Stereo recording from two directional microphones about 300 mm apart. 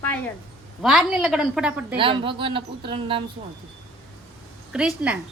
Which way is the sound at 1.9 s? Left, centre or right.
Centre.